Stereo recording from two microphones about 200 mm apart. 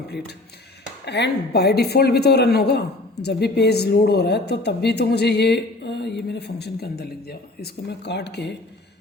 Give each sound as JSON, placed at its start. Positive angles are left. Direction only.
{"t": 1.0, "sound": "speech", "side_deg": 60}